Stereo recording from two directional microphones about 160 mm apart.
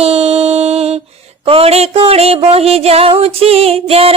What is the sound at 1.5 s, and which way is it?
Music, 40° right (ahead or behind).